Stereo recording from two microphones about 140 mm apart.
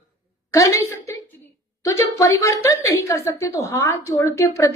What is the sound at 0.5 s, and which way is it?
A woman's voice, 20° left (ahead or behind).